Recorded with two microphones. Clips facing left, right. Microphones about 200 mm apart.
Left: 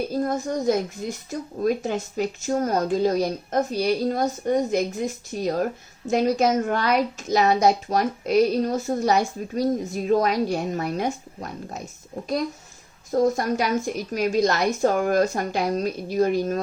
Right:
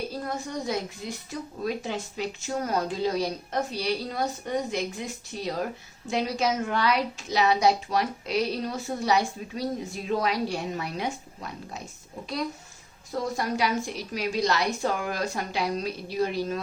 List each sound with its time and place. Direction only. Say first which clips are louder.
0.1 s a woman's voice: left 8 dB; 45° left (ahead or behind)
13.1 s a woman's voice: left 8 dB; 45° left (ahead or behind)